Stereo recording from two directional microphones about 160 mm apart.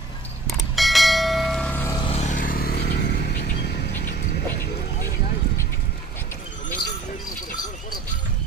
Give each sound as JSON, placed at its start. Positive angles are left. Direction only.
{"t": 0.5, "sound": "bell", "side_deg": 0}
{"t": 1.9, "sound": "vehicle", "side_deg": 30}
{"t": 2.1, "sound": "vehicle", "side_deg": 50}